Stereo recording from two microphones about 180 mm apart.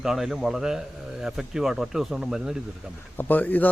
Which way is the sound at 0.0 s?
Centre (ahead or behind).